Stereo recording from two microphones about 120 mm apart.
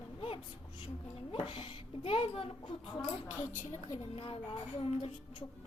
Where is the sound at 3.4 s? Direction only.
20° left (ahead or behind).